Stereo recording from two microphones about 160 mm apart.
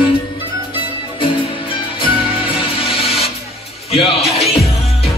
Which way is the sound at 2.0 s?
30° left (ahead or behind).